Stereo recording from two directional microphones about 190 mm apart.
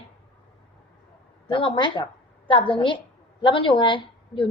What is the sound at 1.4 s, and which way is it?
A woman's voice, 25° left (ahead or behind).